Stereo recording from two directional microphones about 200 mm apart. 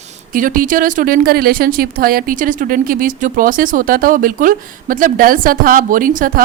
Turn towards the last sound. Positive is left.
turn(degrees=-45)  # may be behind; listen again after turning